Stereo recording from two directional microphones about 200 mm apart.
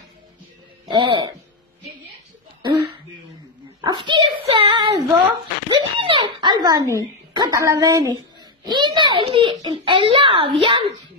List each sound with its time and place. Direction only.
0.8 s music: 25° right (ahead or behind)
2.6 s throat clearing: 25° right (ahead or behind)
3.8 s a sound: 25° right (ahead or behind)